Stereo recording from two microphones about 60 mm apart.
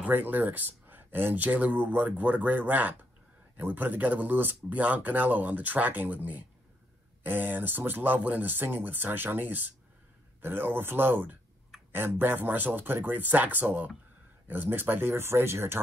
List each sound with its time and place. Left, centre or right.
0.1 s speech: right